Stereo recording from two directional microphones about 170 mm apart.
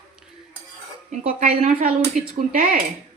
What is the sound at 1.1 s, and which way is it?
A woman's voice, 50° right (ahead or behind).